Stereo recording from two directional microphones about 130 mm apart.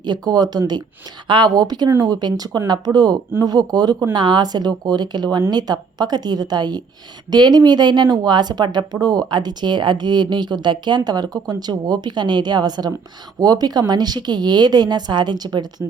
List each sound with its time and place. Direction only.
0.0 s speech: 35° right (ahead or behind)